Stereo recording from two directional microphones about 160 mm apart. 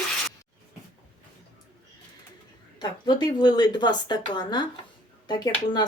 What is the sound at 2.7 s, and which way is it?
Speech, 25° left (ahead or behind).